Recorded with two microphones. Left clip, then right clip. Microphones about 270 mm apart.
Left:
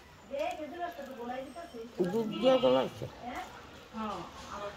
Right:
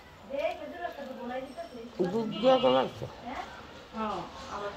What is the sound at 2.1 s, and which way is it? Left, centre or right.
Speech, centre.